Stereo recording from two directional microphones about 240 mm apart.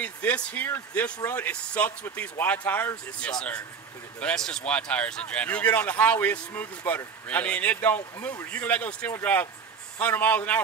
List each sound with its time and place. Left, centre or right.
0.0 s speech: centre